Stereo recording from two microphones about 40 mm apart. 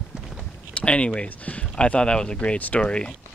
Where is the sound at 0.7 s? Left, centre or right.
Left.